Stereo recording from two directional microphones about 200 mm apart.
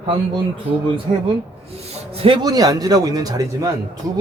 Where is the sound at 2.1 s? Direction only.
25° right (ahead or behind).